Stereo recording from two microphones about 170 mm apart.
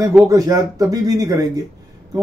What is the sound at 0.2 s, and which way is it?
A man's voice, 20° right (ahead or behind).